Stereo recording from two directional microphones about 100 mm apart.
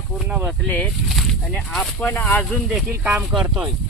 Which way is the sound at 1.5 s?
10° left (ahead or behind).